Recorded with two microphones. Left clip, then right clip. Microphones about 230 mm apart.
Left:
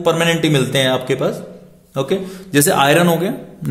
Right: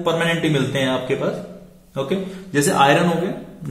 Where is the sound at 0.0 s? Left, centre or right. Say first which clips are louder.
Left 4 dB; left.